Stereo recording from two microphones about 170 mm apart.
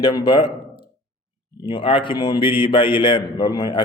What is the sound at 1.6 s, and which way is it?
A man's voice, 30° left (ahead or behind).